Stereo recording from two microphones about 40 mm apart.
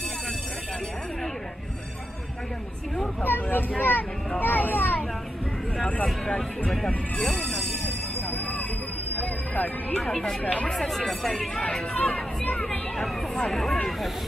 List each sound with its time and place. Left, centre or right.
3.3 s speech: left
4.4 s a sound: left
7.2 s speech: centre
7.8 s music: left
9.9 s speech: centre
10.4 s speech: left
10.7 s speech: centre
12.0 s speech: left
12.6 s speech: centre